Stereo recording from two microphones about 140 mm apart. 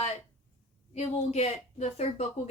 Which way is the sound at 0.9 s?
50° left (ahead or behind).